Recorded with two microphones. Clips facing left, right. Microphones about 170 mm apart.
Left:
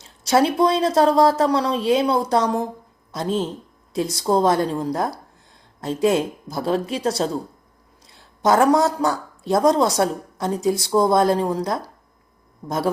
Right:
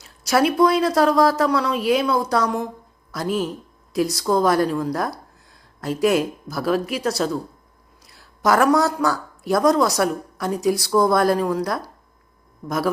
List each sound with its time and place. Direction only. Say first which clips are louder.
0.0 s a woman's voice: left 1 dB; 25° left (ahead or behind)